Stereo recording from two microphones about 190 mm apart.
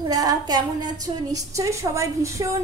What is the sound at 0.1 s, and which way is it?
A woman's voice, 20° right (ahead or behind).